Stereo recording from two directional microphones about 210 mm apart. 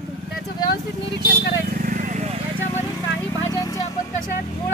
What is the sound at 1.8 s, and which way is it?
Vehicle, 40° right (ahead or behind).